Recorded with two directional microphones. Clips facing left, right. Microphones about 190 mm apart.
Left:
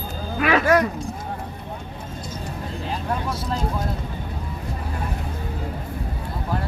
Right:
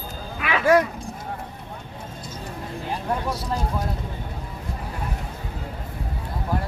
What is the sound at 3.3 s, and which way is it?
Speech, 15° right (ahead or behind).